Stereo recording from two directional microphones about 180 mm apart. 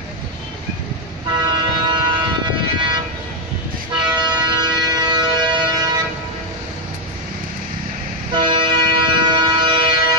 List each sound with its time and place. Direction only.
1.4 s vehicle: 25° right (ahead or behind)
3.9 s music: 25° right (ahead or behind)
8.3 s music: 25° right (ahead or behind)